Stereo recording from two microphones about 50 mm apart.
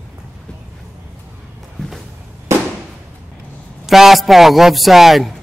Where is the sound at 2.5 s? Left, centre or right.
Right.